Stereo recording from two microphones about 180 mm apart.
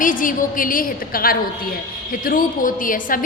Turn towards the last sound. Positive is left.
turn(degrees=50)  # may be behind; listen again after turning